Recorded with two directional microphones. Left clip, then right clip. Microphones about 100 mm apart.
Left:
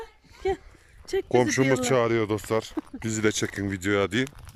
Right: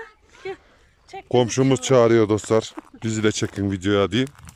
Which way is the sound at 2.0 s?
35° right (ahead or behind).